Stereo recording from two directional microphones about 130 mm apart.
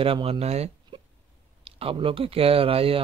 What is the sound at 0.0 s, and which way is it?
Speech, 45° right (ahead or behind).